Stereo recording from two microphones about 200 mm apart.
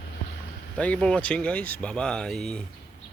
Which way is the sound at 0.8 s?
5° left (ahead or behind).